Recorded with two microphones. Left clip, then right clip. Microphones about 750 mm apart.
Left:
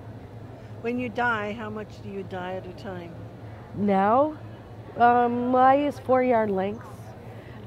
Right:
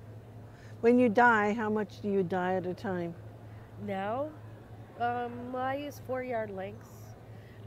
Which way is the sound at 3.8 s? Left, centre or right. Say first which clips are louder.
Left 13 dB; left.